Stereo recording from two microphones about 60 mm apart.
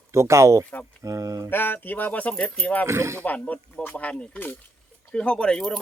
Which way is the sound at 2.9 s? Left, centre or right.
Right.